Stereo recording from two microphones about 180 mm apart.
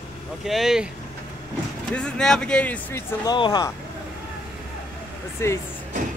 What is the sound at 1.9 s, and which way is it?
Speech, 5° left (ahead or behind).